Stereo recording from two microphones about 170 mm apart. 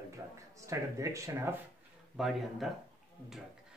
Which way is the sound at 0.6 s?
20° right (ahead or behind).